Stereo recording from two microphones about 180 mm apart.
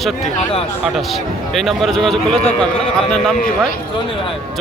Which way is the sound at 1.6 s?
Centre (ahead or behind).